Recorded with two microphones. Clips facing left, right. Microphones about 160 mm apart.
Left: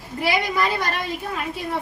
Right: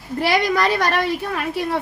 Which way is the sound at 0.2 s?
80° right.